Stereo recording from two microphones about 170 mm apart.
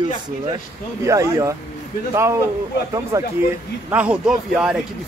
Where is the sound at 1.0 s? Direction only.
20° right (ahead or behind).